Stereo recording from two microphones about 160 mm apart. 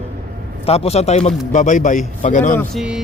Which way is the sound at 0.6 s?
40° left (ahead or behind).